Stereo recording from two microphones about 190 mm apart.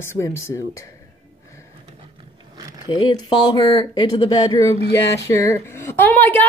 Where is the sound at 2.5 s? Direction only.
20° right (ahead or behind).